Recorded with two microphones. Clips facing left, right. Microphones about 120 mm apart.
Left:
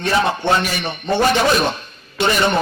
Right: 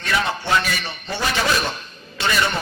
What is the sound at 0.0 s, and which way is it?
Speech, 30° left (ahead or behind).